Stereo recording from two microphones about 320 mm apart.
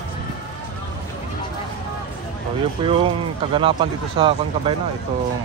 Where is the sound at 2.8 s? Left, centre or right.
Centre.